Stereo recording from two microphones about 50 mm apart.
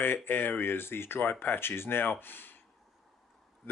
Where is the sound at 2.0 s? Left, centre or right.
Left.